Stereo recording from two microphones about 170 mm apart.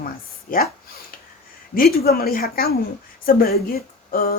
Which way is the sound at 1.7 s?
65° left (ahead or behind).